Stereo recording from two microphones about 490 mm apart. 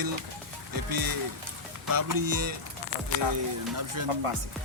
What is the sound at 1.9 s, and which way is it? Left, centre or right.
Music, right.